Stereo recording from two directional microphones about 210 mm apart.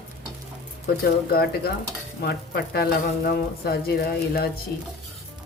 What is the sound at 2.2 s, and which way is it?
Speech, 50° left (ahead or behind).